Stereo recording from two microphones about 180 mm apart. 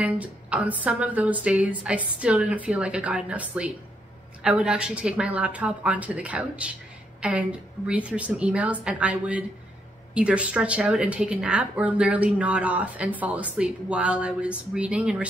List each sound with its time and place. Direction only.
0.0 s a woman's voice: 5° right (ahead or behind)